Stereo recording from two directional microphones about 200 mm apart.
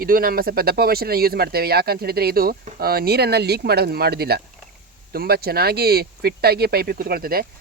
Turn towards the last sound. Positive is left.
turn(degrees=-50)  # may be behind; listen again after turning